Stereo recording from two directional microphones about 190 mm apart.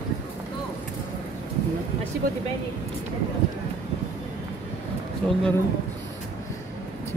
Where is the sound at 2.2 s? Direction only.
50° right (ahead or behind).